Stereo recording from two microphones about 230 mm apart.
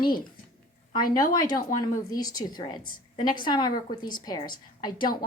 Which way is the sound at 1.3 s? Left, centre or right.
Centre.